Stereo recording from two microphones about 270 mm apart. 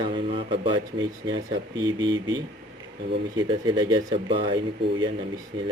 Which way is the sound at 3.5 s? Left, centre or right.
Centre.